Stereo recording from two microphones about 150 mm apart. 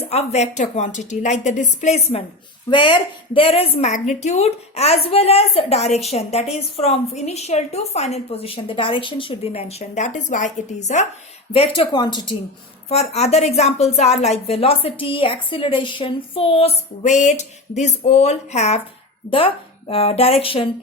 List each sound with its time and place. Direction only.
0.0 s a woman's voice: 45° left (ahead or behind)
2.6 s a woman's voice: 30° left (ahead or behind); by 11.0 s 50° left (ahead or behind)
11.5 s speech: 40° left (ahead or behind)
12.9 s a woman's voice: 45° left (ahead or behind)
19.9 s speech: 40° left (ahead or behind)